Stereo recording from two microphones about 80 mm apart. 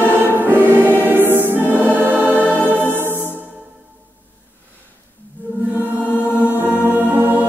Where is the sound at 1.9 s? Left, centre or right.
Right.